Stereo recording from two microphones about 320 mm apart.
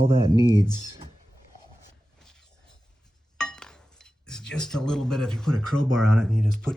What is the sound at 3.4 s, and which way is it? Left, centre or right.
Speech, centre.